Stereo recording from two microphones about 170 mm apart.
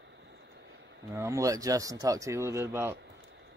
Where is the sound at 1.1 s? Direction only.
20° right (ahead or behind).